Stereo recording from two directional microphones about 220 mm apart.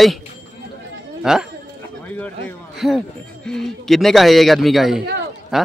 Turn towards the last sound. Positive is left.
turn(degrees=0)  # may be behind; listen again after turning